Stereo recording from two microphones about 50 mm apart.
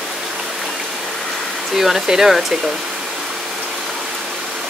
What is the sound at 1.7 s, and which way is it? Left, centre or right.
Speech, centre.